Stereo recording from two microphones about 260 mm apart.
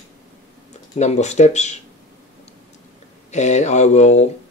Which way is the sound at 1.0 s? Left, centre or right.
Left.